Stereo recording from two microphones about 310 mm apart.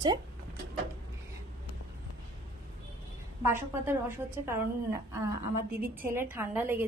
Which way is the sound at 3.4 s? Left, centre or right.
Centre.